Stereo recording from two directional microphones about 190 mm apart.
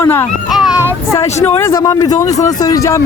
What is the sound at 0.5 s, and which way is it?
Child singing, 5° right (ahead or behind).